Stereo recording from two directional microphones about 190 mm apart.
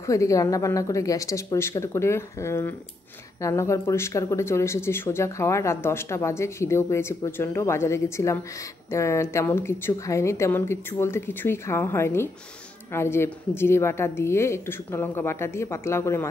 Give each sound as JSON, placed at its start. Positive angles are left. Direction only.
{"t": 0.0, "sound": "speech", "side_deg": 15}